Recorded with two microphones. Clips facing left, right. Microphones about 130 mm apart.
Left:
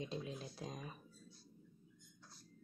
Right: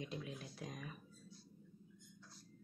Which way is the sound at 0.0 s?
30° left (ahead or behind).